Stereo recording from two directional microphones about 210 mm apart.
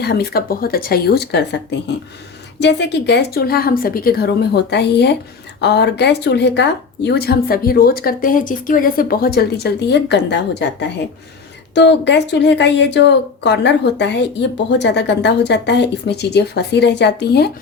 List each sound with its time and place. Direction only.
0.0 s speech: 50° left (ahead or behind)